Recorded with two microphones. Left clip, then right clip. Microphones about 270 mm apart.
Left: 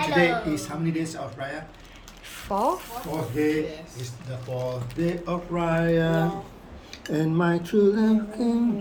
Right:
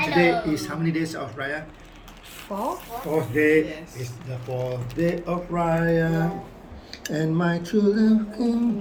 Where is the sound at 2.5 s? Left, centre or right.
Centre.